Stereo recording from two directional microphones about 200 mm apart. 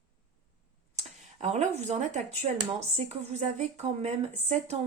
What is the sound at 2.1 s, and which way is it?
A woman's voice, 35° right (ahead or behind).